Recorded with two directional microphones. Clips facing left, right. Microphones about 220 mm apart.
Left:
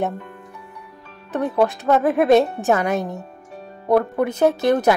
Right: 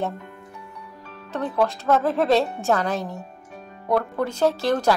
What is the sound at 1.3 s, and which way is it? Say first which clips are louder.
A woman's voice: left 4 dB; 15° left (ahead or behind).